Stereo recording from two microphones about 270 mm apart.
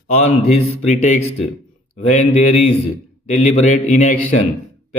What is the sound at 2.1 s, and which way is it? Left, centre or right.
Speech, left.